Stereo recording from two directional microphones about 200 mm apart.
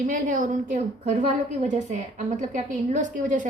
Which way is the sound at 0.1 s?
40° right (ahead or behind).